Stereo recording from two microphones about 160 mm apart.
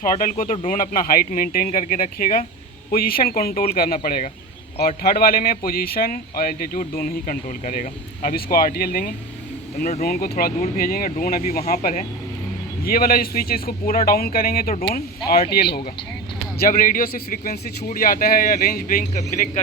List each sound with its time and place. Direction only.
0.0 s a man's voice: 60° left (ahead or behind)
4.8 s a man's voice: 75° left (ahead or behind)
16.6 s a man's voice: 60° left (ahead or behind)